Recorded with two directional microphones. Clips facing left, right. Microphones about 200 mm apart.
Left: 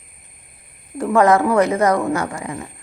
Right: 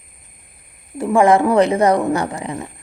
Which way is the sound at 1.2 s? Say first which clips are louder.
Right 3 dB; 30° right (ahead or behind).